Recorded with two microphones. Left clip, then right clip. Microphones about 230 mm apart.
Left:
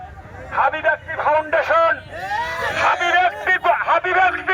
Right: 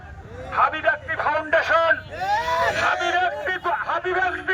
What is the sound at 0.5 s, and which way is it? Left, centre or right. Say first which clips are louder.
A man's voice: left 2 dB; centre.